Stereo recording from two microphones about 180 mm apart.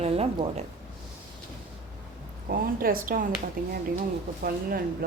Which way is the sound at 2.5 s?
55° right (ahead or behind).